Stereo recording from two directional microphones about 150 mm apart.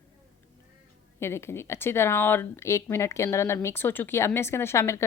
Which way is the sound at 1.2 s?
15° left (ahead or behind).